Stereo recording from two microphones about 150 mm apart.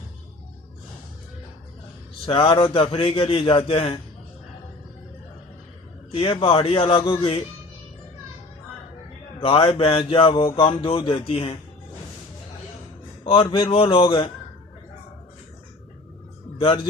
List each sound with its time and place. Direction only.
2.2 s mantra: 35° left (ahead or behind)
6.1 s mantra: 35° left (ahead or behind)
9.4 s mantra: 35° left (ahead or behind)
13.2 s mantra: 40° left (ahead or behind)
16.6 s speech: 35° left (ahead or behind)